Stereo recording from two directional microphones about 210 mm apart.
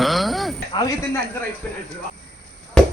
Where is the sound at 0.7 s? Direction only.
15° left (ahead or behind).